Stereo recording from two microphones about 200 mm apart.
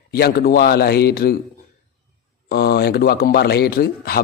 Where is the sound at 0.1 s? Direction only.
50° left (ahead or behind).